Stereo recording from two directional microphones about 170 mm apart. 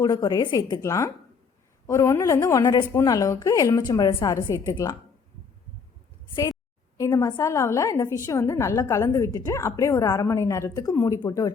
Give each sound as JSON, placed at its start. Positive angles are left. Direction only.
{"t": 0.0, "sound": "a woman's voice", "side_deg": 20}
{"t": 6.9, "sound": "a woman's voice", "side_deg": 20}